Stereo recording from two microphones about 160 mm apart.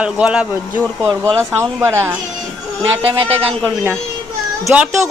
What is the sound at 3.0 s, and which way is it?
Speech, 35° right (ahead or behind).